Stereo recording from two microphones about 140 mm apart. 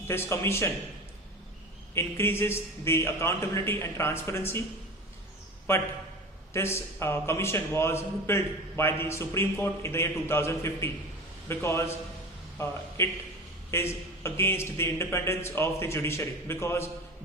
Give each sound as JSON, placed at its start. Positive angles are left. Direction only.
{"t": 0.1, "sound": "a man's voice", "side_deg": 15}
{"t": 2.0, "sound": "a man's voice", "side_deg": 15}
{"t": 5.7, "sound": "a man's voice", "side_deg": 20}